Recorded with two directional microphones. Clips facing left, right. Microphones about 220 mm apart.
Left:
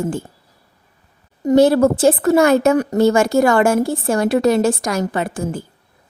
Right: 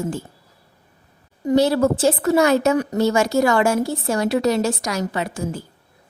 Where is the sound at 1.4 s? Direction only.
50° left (ahead or behind).